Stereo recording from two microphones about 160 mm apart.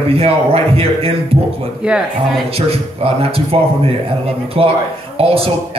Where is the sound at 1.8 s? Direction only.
5° right (ahead or behind).